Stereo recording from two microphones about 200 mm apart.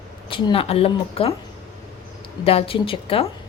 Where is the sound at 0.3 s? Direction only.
25° left (ahead or behind).